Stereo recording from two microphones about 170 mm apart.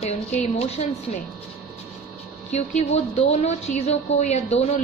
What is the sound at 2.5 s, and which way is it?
A woman's voice, 40° left (ahead or behind).